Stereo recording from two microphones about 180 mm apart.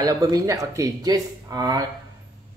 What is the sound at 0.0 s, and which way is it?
Speech, 20° right (ahead or behind).